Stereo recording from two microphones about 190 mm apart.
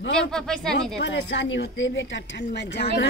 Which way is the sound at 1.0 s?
70° left (ahead or behind).